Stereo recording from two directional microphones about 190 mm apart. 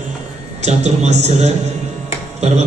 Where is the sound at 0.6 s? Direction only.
35° right (ahead or behind).